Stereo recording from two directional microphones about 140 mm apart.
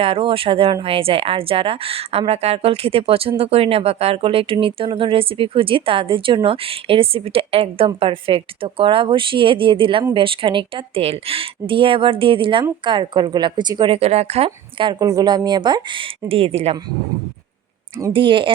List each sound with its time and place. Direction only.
0.0 s speech: 40° right (ahead or behind)
18.1 s speech: 35° right (ahead or behind)